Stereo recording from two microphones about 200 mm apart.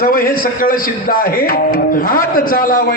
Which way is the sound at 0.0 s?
45° left (ahead or behind).